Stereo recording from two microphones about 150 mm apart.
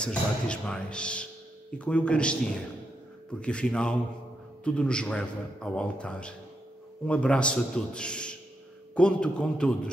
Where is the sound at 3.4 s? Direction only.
5° left (ahead or behind).